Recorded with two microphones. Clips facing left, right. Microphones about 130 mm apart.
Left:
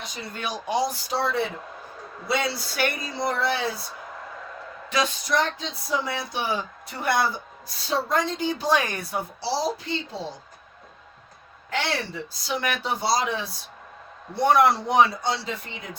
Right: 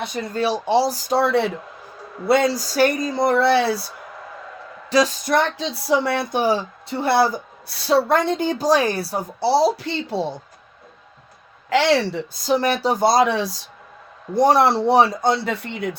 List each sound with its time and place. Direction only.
0.0 s speech: 60° right (ahead or behind)
0.3 s speech: 30° right (ahead or behind); by 1.5 s 65° right (ahead or behind)
2.2 s a woman's voice: 50° right (ahead or behind)
3.3 s speech: 70° right (ahead or behind)
4.9 s speech: 35° right (ahead or behind)
5.3 s speech: 75° right (ahead or behind)
6.4 s speech: 35° right (ahead or behind)
7.8 s a woman's voice: 75° right (ahead or behind); by 9.2 s 35° right (ahead or behind)
9.4 s speech: 65° right (ahead or behind)
11.7 s speech: 90° right
12.3 s a woman's voice: 40° right (ahead or behind); by 13.6 s 80° right
14.3 s speech: 35° right (ahead or behind); by 15.5 s 50° right (ahead or behind)
15.6 s speech: 70° right (ahead or behind)